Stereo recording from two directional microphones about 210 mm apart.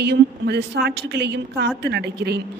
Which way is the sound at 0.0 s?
50° right (ahead or behind).